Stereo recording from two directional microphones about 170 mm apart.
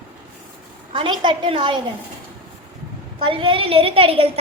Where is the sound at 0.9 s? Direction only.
30° right (ahead or behind).